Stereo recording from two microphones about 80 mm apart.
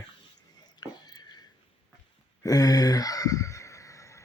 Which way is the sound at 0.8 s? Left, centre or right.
Left.